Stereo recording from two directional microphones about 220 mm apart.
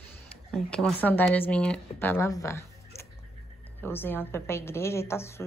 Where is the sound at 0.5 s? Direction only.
5° left (ahead or behind).